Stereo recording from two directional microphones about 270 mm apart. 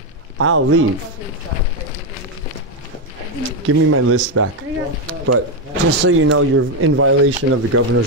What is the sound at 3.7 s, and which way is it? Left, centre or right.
Speech, right.